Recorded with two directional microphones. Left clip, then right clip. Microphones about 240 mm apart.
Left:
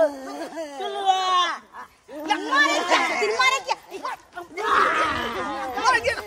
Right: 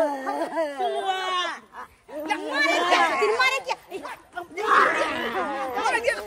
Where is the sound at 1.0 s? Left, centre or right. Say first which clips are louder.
Left 6 dB; centre.